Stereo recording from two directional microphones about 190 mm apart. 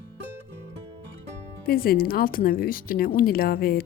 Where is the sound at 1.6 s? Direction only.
50° left (ahead or behind).